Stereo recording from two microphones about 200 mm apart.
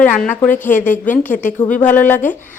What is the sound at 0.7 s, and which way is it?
Speech, 40° left (ahead or behind).